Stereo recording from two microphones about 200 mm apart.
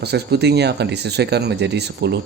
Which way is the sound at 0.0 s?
55° right (ahead or behind).